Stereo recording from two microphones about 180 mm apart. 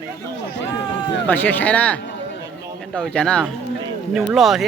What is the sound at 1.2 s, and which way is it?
Speech, 10° left (ahead or behind).